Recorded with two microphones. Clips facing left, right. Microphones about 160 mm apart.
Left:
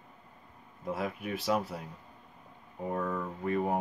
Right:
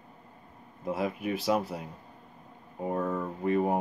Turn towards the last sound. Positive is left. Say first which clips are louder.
# right 4 dB
turn(degrees=-10)  # may be behind; listen again after turning